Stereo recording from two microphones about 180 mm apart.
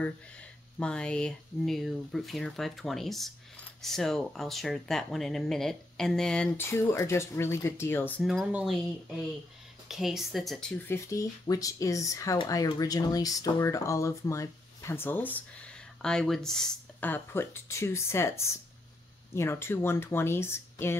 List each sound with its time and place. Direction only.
0.7 s speech: 5° left (ahead or behind)
8.2 s speech: centre (ahead or behind)
9.8 s speech: centre (ahead or behind)
10.9 s speech: 15° left (ahead or behind)